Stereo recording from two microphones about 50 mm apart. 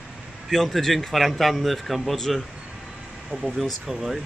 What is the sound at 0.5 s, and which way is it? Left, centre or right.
Speech, centre.